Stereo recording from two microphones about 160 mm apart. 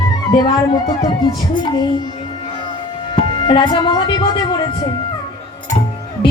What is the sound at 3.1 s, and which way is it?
Speech, 30° left (ahead or behind).